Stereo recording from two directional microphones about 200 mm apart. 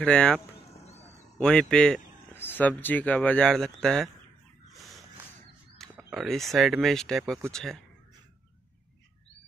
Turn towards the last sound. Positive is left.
turn(degrees=0)  # may be behind; listen again after turning